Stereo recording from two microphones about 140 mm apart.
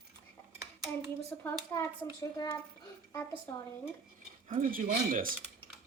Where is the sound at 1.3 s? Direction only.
15° left (ahead or behind).